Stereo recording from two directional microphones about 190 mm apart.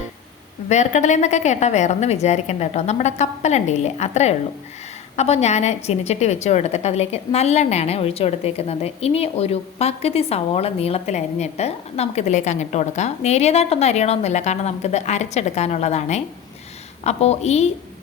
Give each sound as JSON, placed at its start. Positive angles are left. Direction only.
{"t": 0.7, "sound": "a woman's voice", "side_deg": 40}